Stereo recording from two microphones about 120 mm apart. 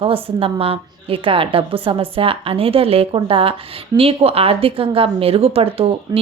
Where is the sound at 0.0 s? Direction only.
50° right (ahead or behind).